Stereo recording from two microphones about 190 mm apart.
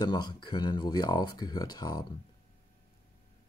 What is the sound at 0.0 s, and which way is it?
Speech, 20° left (ahead or behind).